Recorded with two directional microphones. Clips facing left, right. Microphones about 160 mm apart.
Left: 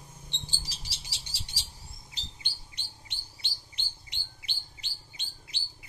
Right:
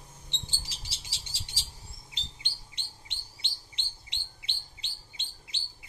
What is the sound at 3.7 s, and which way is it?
Chirp, 25° right (ahead or behind).